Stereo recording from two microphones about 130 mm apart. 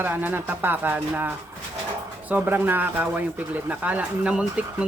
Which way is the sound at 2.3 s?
15° right (ahead or behind).